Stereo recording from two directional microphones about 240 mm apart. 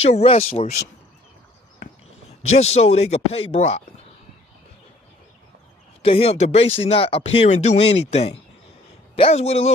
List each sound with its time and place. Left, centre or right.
0.0 s speech: left
2.5 s speech: left
6.0 s speech: left